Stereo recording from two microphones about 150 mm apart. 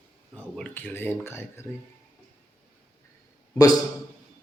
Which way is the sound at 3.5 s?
25° left (ahead or behind).